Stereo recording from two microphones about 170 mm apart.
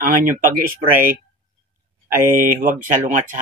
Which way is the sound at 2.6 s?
50° right (ahead or behind).